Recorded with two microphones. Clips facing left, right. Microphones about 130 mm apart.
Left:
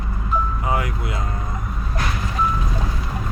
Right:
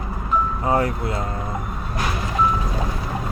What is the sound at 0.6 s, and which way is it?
Speech, 35° right (ahead or behind).